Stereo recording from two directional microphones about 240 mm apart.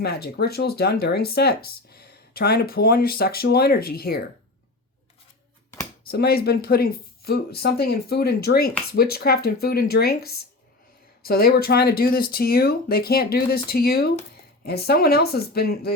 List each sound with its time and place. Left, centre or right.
0.0 s speech: left
6.1 s speech: left